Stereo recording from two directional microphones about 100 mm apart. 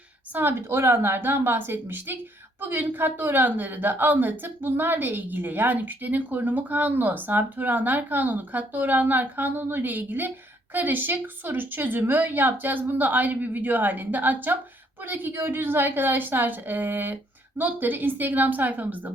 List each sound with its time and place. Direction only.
0.3 s speech: 20° right (ahead or behind)